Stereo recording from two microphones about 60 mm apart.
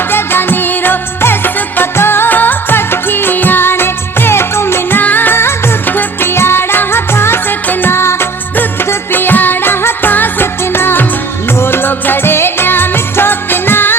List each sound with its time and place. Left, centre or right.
0.1 s music of bollywood: left
9.1 s music: left